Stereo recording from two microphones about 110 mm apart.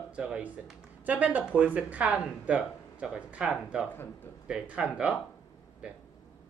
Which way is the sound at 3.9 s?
20° left (ahead or behind).